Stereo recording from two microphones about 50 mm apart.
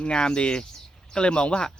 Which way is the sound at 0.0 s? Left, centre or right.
Centre.